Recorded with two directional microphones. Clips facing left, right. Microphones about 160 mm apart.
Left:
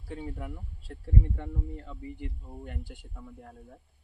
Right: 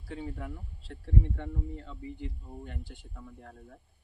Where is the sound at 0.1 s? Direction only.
10° left (ahead or behind).